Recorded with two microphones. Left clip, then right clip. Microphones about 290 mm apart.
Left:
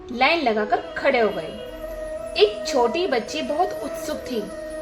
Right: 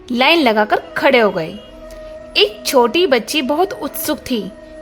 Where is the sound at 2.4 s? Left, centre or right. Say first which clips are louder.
Right 6 dB; right.